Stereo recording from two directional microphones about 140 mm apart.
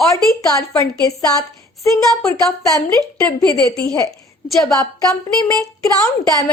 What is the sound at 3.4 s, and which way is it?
Speech, 25° left (ahead or behind).